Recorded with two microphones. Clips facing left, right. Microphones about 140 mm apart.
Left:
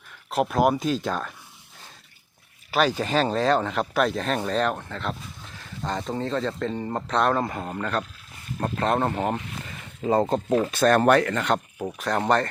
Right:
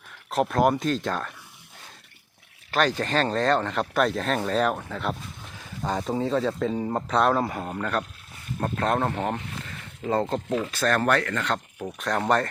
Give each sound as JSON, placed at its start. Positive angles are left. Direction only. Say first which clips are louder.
{"t": 0.3, "sound": "speech", "louder": "even", "side_deg": 0}
{"t": 2.7, "sound": "speech", "louder": "left 1 dB", "side_deg": 5}
{"t": 11.9, "sound": "speech", "louder": "left 1 dB", "side_deg": 0}